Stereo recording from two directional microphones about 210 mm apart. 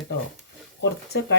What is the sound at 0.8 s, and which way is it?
Speech, 55° left (ahead or behind).